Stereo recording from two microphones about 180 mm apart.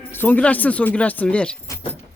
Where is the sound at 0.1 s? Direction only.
10° left (ahead or behind).